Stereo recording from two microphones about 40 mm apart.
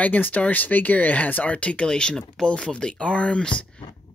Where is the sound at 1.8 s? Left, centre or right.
Left.